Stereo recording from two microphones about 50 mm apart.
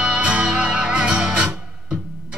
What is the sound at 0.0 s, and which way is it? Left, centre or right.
Music, right.